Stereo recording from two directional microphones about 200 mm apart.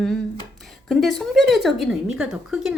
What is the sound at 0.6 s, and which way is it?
A woman's voice, centre (ahead or behind).